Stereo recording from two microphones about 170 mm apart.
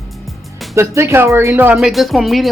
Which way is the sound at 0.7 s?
15° right (ahead or behind).